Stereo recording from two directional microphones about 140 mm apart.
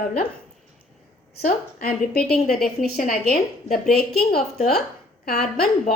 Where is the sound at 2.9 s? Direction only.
90° left.